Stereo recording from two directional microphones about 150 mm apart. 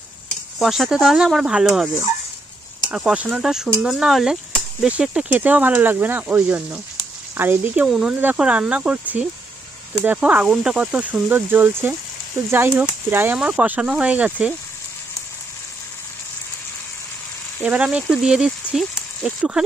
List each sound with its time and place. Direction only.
0.6 s speech: centre (ahead or behind)
17.6 s speech: 10° right (ahead or behind)